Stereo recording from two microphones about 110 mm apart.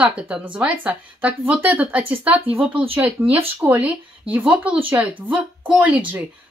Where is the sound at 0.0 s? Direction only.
10° right (ahead or behind).